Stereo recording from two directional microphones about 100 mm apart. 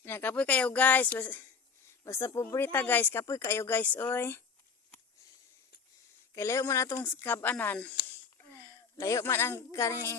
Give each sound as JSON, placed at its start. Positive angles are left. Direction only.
{"t": 0.0, "sound": "speech", "side_deg": 20}
{"t": 6.3, "sound": "speech", "side_deg": 30}
{"t": 7.6, "sound": "speech", "side_deg": 20}
{"t": 8.4, "sound": "a sound", "side_deg": 30}
{"t": 9.2, "sound": "speech", "side_deg": 25}